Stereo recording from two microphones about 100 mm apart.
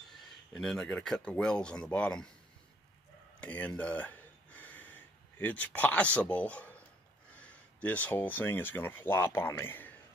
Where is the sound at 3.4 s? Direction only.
15° left (ahead or behind).